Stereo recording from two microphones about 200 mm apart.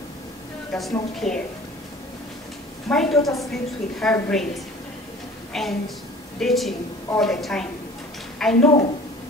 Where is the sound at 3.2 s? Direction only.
15° left (ahead or behind).